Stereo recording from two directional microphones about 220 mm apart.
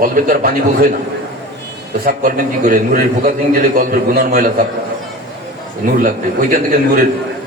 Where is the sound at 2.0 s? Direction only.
40° right (ahead or behind).